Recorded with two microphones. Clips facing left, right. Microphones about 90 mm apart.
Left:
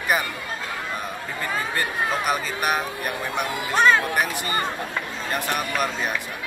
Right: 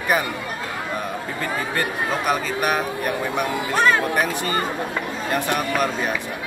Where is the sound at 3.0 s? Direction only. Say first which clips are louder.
Right 4 dB; 25° right (ahead or behind).